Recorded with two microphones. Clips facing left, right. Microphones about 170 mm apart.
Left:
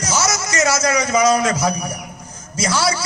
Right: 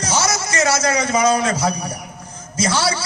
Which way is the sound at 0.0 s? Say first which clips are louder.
Even; 30° right (ahead or behind).